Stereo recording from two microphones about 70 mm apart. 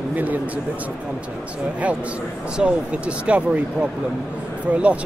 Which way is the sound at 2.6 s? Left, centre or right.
Centre.